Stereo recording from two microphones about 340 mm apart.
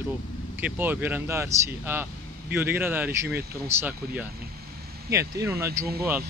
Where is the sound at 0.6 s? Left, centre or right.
Centre.